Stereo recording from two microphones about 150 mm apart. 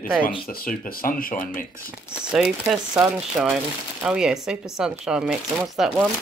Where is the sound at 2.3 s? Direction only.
5° right (ahead or behind).